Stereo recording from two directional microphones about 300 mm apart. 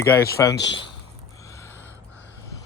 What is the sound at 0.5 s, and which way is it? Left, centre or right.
Speech, left.